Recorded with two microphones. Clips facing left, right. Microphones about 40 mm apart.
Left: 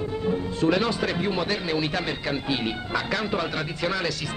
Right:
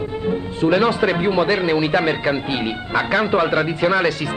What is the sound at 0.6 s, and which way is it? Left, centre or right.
Speech, right.